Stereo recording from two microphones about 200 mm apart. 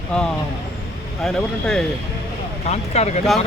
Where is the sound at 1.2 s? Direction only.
5° left (ahead or behind).